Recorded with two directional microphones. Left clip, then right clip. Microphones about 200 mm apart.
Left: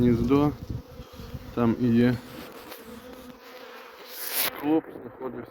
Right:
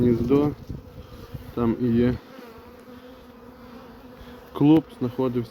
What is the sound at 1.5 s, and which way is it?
Speech, centre (ahead or behind).